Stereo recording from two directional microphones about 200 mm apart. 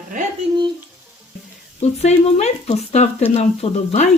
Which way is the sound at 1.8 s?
35° left (ahead or behind).